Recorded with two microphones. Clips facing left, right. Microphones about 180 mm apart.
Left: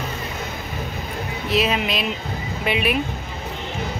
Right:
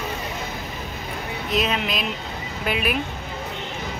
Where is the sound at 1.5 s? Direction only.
5° left (ahead or behind).